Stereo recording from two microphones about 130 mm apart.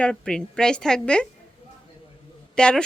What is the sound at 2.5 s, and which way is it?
Speech, 5° left (ahead or behind).